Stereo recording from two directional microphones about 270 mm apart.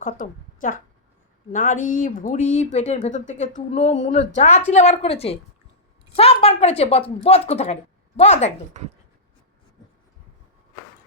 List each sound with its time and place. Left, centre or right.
0.0 s a woman's voice: left
8.7 s speech: right